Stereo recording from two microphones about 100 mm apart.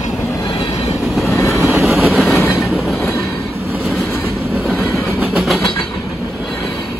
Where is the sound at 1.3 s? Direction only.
25° left (ahead or behind).